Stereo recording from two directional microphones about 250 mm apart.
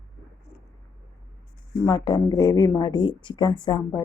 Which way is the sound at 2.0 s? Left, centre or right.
Centre.